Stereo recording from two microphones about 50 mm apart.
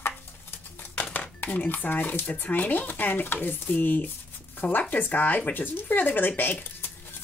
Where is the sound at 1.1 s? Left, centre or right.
Left.